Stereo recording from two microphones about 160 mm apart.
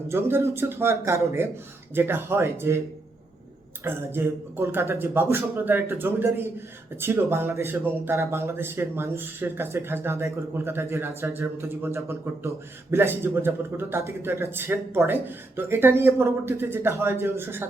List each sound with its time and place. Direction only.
0.1 s a man's voice: 15° right (ahead or behind)
3.8 s a man's voice: 15° right (ahead or behind)